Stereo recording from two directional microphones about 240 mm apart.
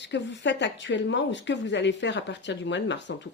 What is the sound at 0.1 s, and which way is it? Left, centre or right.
Speech, left.